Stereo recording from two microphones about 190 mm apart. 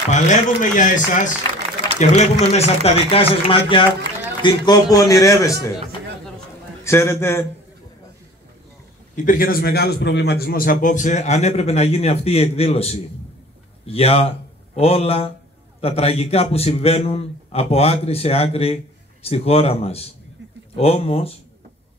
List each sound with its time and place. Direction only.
0.1 s a man's voice: 40° left (ahead or behind); by 5.7 s 15° left (ahead or behind)
6.8 s a man's voice: 15° left (ahead or behind)
9.1 s a man's voice: 45° left (ahead or behind)